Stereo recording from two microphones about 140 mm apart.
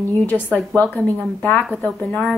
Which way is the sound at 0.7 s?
10° left (ahead or behind).